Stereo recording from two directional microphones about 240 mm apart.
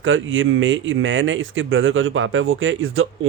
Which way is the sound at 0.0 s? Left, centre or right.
Right.